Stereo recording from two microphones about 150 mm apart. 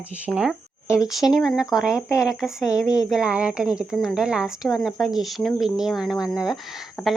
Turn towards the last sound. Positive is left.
turn(degrees=15)  # may be behind; listen again after turning